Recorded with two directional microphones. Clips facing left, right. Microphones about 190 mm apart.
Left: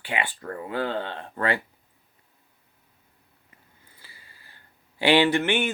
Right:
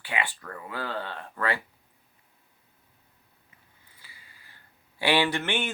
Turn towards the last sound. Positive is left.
turn(degrees=15)  # may be behind; listen again after turning